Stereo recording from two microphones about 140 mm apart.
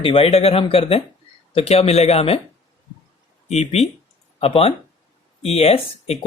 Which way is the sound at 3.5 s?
50° left (ahead or behind).